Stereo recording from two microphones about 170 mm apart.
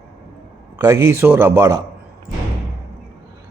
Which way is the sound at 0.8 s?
15° right (ahead or behind).